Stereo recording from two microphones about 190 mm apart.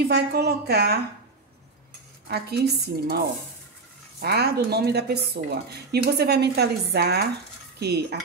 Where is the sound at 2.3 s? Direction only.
60° right (ahead or behind).